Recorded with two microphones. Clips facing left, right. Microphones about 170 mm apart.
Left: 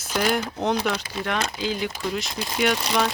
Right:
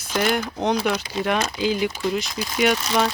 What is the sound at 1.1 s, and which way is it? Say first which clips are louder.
Speech: right 4 dB; 20° right (ahead or behind).